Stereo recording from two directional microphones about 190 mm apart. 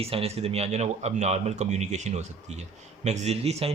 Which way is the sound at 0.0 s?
30° right (ahead or behind).